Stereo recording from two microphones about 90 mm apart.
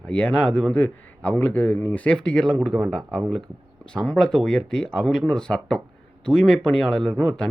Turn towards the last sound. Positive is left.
turn(degrees=5)  # may be behind; listen again after turning